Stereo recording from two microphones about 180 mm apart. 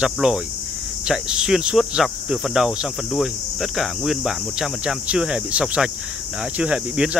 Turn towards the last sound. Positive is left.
turn(degrees=-5)  # may be behind; listen again after turning